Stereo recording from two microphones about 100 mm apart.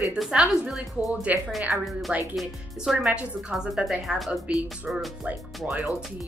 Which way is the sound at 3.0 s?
10° right (ahead or behind).